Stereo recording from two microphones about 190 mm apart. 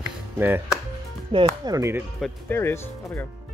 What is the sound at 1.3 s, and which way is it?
Speech, 20° right (ahead or behind).